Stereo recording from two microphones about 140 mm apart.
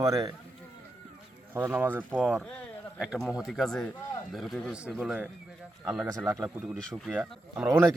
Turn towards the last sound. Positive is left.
turn(degrees=-10)  # may be behind; listen again after turning